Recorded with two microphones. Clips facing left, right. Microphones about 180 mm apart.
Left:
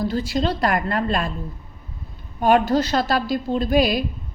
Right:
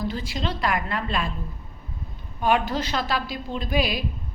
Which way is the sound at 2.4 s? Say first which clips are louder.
Left 6 dB; 40° left (ahead or behind).